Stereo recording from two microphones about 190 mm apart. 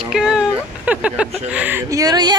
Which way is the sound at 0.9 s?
5° right (ahead or behind).